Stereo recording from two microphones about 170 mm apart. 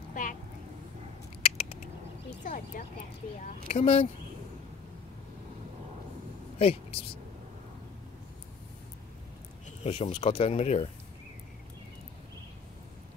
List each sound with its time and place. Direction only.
0.1 s vehicle: 50° left (ahead or behind)
1.4 s a sound: 35° left (ahead or behind)
2.4 s speech: 50° left (ahead or behind)
3.6 s speech: 40° left (ahead or behind)
6.6 s speech: 35° left (ahead or behind)
9.8 s speech: 35° left (ahead or behind)